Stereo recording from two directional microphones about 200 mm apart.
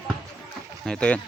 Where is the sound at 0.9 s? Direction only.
5° left (ahead or behind).